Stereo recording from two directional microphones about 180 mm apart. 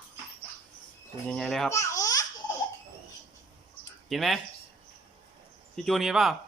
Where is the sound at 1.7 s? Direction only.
15° left (ahead or behind).